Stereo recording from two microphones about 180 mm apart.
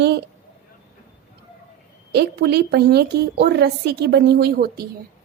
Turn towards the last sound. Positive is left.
turn(degrees=-55)  # may be behind; listen again after turning